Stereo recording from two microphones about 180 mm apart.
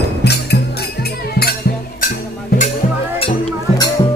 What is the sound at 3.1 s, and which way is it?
Music, 25° left (ahead or behind).